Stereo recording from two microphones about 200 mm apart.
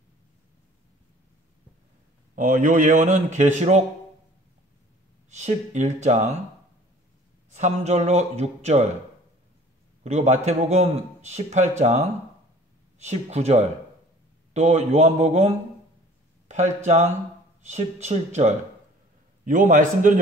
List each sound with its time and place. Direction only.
2.3 s a man's voice: 40° right (ahead or behind)
5.3 s a man's voice: 35° right (ahead or behind)
7.5 s a man's voice: 35° right (ahead or behind)
10.0 s a man's voice: 35° right (ahead or behind)
13.0 s a man's voice: 35° right (ahead or behind)